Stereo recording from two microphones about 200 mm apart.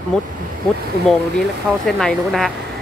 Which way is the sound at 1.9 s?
Centre (ahead or behind).